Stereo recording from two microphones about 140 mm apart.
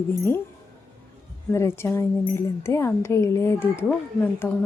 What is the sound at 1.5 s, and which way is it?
Speech, 20° left (ahead or behind).